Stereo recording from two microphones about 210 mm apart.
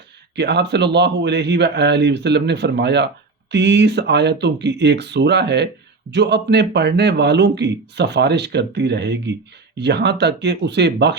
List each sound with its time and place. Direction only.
0.3 s a man's voice: 55° right (ahead or behind)